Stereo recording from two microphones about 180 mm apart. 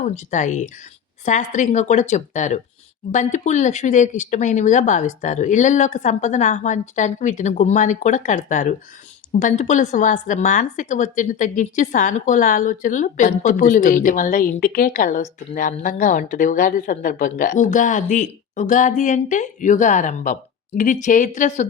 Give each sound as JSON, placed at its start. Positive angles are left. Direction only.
{"t": 0.0, "sound": "a woman's voice", "side_deg": 40}